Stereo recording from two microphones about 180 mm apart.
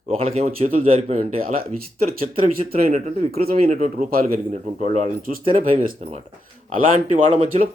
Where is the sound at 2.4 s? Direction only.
50° right (ahead or behind).